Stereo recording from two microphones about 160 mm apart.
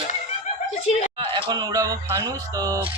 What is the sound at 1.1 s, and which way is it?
Speech, 30° right (ahead or behind).